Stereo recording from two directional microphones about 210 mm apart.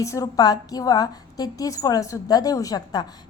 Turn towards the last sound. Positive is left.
turn(degrees=20)  # may be behind; listen again after turning